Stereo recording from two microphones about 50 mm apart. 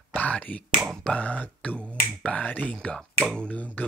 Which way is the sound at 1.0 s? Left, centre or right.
Left.